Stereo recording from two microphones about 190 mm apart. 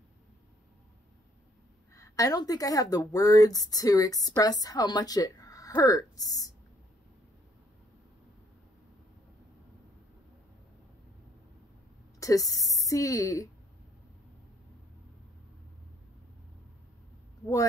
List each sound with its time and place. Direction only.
2.0 s speech: 15° left (ahead or behind)
12.2 s a woman's voice: 15° left (ahead or behind)